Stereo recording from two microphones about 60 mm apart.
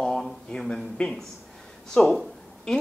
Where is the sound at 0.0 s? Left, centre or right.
Centre.